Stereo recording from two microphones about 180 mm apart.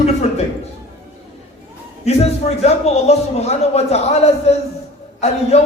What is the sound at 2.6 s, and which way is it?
Speech, 35° left (ahead or behind).